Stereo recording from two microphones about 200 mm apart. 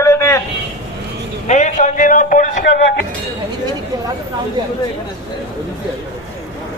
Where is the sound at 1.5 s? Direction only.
35° left (ahead or behind).